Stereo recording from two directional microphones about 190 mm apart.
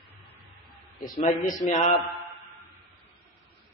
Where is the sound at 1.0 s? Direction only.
40° left (ahead or behind).